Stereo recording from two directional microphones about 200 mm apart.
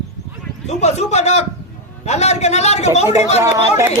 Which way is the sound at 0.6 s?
35° left (ahead or behind).